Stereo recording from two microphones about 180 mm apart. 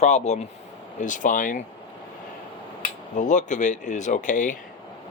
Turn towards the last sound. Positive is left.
turn(degrees=45)  # may be behind; listen again after turning